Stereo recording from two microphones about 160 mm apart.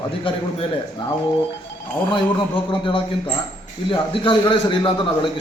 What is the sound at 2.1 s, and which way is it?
A man's voice, 30° left (ahead or behind).